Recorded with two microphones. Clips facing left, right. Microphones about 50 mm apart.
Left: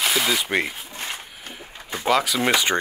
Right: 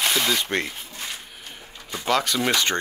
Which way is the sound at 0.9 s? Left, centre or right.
Left.